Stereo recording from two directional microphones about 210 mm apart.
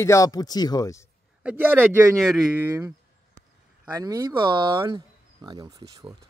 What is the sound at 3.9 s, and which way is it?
Speech, 15° right (ahead or behind).